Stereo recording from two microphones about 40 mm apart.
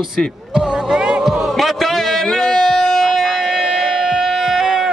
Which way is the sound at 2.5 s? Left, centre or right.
Centre.